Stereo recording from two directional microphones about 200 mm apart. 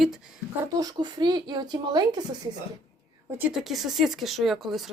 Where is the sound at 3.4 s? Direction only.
Centre (ahead or behind).